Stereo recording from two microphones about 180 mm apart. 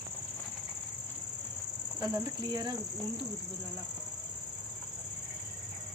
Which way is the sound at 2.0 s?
20° right (ahead or behind).